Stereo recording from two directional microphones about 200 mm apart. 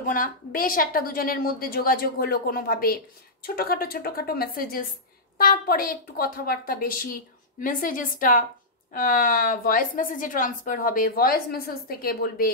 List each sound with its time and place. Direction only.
0.0 s a woman's voice: 45° left (ahead or behind)